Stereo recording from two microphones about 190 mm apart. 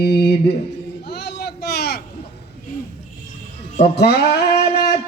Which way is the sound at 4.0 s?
55° left (ahead or behind).